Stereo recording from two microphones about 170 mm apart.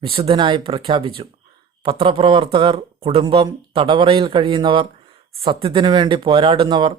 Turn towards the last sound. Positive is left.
turn(degrees=-25)  # may be behind; listen again after turning